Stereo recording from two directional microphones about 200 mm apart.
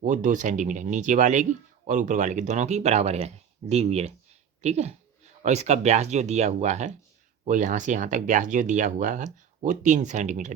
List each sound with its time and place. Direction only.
0.0 s speech: 40° right (ahead or behind)